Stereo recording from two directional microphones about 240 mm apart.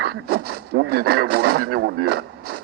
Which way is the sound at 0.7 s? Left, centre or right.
Right.